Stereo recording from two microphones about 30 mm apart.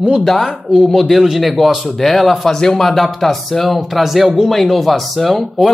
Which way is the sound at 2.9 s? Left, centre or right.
Centre.